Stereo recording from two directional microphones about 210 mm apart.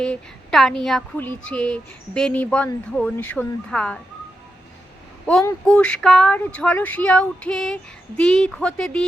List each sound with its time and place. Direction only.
0.0 s speech: centre (ahead or behind)
5.6 s speech: 5° left (ahead or behind)